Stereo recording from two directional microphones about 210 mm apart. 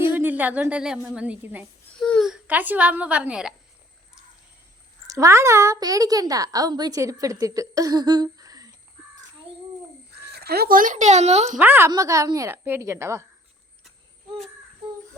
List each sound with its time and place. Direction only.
0.2 s a woman's voice: 10° right (ahead or behind)
5.0 s a woman's voice: 15° right (ahead or behind)
10.2 s speech: 50° right (ahead or behind); by 11.5 s 30° right (ahead or behind)
11.5 s a woman's voice: 10° right (ahead or behind)